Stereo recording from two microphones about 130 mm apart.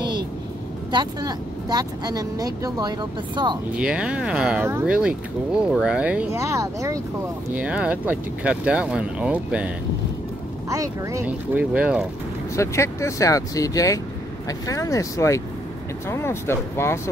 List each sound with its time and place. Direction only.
0.9 s speech: 30° right (ahead or behind)
3.7 s speech: 10° right (ahead or behind)
4.6 s speech: 20° right (ahead or behind)
4.9 s speech: 5° right (ahead or behind)
6.3 s speech: 25° right (ahead or behind)
7.5 s speech: 10° right (ahead or behind)
10.7 s speech: 25° right (ahead or behind)
11.2 s speech: 10° right (ahead or behind)
12.5 s speech: 20° left (ahead or behind)